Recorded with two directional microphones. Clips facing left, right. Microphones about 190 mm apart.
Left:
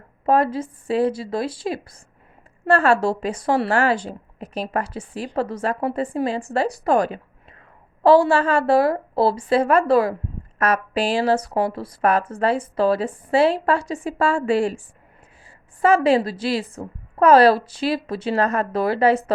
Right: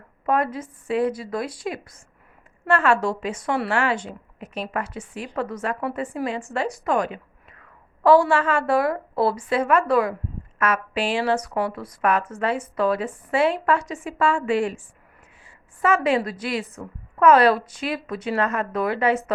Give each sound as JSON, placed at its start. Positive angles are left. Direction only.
{"t": 0.3, "sound": "a woman's voice", "side_deg": 30}
{"t": 15.4, "sound": "a sound", "side_deg": 35}
{"t": 16.0, "sound": "a woman's voice", "side_deg": 30}